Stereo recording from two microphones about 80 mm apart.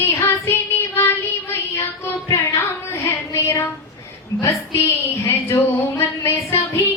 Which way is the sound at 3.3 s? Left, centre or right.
Left.